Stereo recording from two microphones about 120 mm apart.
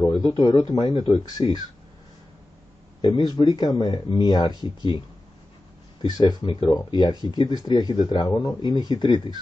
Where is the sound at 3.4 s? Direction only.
35° left (ahead or behind).